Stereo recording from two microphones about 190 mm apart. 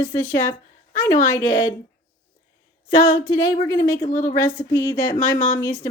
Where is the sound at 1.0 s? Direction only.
15° left (ahead or behind).